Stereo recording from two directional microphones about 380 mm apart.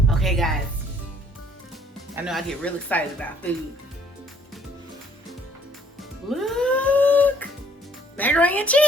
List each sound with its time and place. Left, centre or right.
0.1 s music: centre
2.2 s speech: centre
6.0 s music: centre
8.1 s speech: centre